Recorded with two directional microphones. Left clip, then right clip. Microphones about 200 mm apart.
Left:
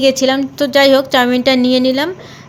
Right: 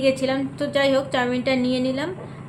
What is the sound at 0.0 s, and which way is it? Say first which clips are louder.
A woman's voice: left 9 dB; 40° left (ahead or behind).